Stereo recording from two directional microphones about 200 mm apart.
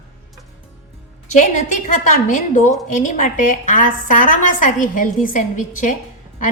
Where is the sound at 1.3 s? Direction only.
40° left (ahead or behind).